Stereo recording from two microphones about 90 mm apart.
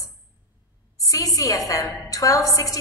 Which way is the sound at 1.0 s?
40° left (ahead or behind).